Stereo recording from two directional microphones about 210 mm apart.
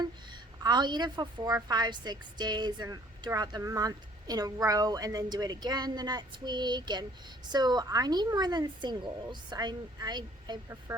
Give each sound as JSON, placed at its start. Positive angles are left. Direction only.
{"t": 0.0, "sound": "a woman's voice", "side_deg": -20}